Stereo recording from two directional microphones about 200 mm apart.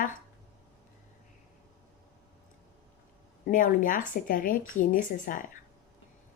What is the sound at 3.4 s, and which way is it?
Speech, 40° left (ahead or behind).